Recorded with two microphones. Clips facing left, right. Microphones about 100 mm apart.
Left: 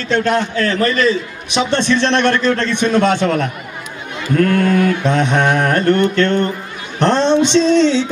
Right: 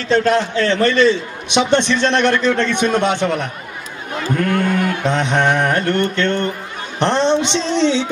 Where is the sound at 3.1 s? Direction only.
15° right (ahead or behind).